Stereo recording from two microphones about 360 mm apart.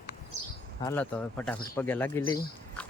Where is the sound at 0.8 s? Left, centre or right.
Centre.